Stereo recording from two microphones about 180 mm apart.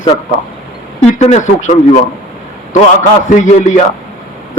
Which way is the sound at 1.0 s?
40° left (ahead or behind).